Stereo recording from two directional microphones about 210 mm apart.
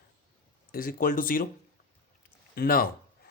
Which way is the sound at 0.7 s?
40° left (ahead or behind).